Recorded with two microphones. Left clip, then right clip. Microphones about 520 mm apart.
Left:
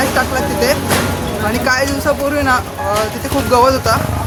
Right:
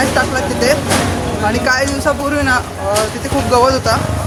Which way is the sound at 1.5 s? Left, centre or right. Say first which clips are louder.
Even; left.